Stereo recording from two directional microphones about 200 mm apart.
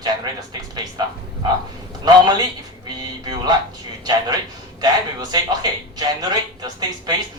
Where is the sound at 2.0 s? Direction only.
20° right (ahead or behind).